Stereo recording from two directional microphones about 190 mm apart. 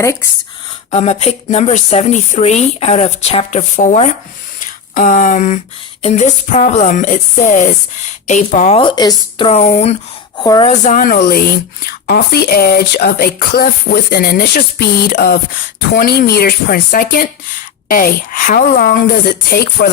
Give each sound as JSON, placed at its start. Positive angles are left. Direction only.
{"t": 0.0, "sound": "speech", "side_deg": 15}
{"t": 0.9, "sound": "speech", "side_deg": 35}
{"t": 8.8, "sound": "a woman's voice", "side_deg": 25}
{"t": 9.5, "sound": "speech", "side_deg": 35}
{"t": 10.4, "sound": "a woman's voice", "side_deg": 20}
{"t": 10.7, "sound": "a woman's voice", "side_deg": 40}